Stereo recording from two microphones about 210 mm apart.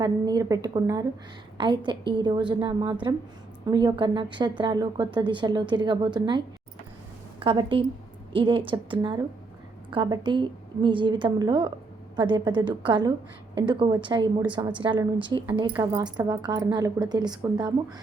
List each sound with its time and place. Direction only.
0.0 s a woman's voice: 15° right (ahead or behind)